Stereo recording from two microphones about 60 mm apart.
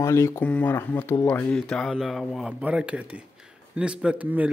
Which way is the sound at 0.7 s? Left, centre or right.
Left.